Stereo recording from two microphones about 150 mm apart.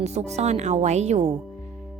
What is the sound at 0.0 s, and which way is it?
Speech, 45° right (ahead or behind).